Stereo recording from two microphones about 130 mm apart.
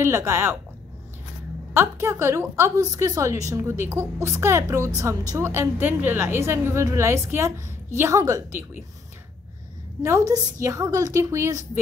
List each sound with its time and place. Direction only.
0.0 s a woman's voice: 20° right (ahead or behind)
1.7 s a woman's voice: 20° right (ahead or behind)
10.0 s a woman's voice: 25° right (ahead or behind)